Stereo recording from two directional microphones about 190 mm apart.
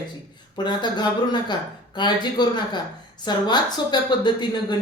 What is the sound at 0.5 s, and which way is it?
Speech, 25° left (ahead or behind).